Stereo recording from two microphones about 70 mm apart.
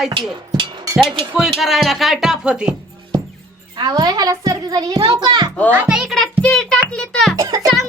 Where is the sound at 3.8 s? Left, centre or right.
Right.